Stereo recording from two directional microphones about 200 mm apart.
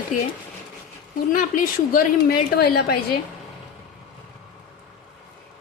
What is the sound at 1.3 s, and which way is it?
A woman's voice, 40° left (ahead or behind).